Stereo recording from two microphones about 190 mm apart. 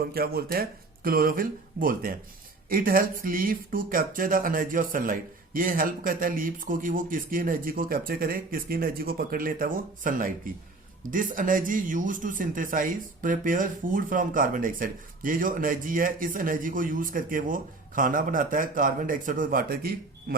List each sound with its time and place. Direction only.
0.0 s speech: 55° right (ahead or behind)